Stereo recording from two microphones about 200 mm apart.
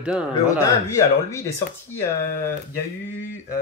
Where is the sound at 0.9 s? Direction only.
15° left (ahead or behind).